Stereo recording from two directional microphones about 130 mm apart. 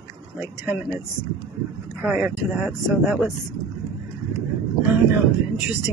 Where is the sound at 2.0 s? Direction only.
10° right (ahead or behind).